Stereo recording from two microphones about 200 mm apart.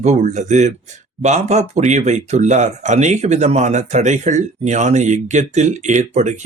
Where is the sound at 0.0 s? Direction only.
35° right (ahead or behind).